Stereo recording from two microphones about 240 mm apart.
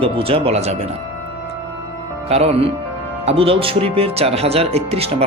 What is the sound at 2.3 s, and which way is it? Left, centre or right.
Speech, right.